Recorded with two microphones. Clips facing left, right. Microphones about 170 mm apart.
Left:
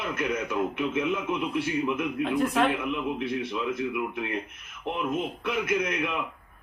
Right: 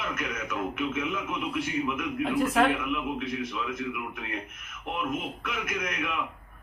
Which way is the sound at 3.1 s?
30° left (ahead or behind).